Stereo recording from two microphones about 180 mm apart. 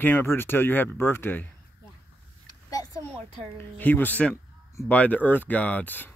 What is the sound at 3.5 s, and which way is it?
Speech, 10° left (ahead or behind).